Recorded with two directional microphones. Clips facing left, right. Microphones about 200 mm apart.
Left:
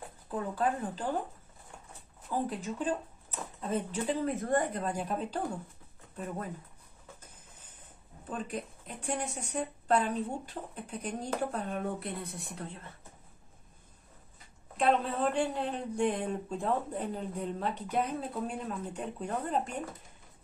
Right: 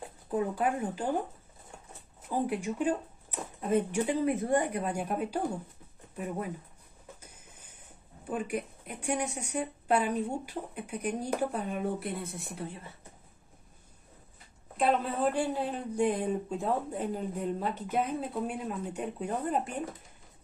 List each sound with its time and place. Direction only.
0.3 s speech: 15° right (ahead or behind)
2.2 s speech: 10° right (ahead or behind)
8.3 s speech: 10° right (ahead or behind)
14.8 s speech: 5° right (ahead or behind)